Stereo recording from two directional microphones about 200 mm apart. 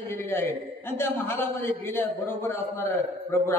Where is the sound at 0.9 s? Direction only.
10° left (ahead or behind).